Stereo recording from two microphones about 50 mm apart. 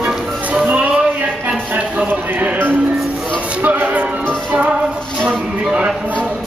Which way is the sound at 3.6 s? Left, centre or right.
Right.